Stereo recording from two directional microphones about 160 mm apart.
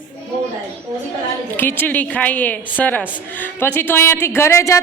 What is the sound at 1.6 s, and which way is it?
A woman's voice, 10° left (ahead or behind).